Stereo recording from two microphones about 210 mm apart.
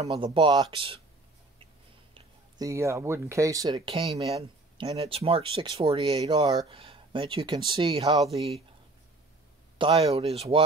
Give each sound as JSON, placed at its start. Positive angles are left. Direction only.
{"t": 0.0, "sound": "speech", "side_deg": -25}
{"t": 2.1, "sound": "speech", "side_deg": -15}
{"t": 9.8, "sound": "speech", "side_deg": -30}